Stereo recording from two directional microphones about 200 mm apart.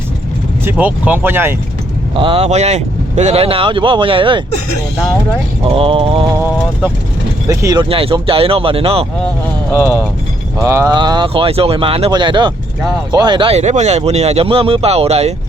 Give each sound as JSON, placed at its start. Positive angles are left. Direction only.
{"t": 0.6, "sound": "speech", "side_deg": -10}
{"t": 2.1, "sound": "speech", "side_deg": -25}
{"t": 5.6, "sound": "speech", "side_deg": -25}
{"t": 6.3, "sound": "speech", "side_deg": -10}
{"t": 9.7, "sound": "speech", "side_deg": -10}